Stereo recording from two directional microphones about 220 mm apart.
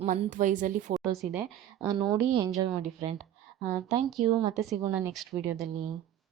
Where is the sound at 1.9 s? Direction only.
20° right (ahead or behind).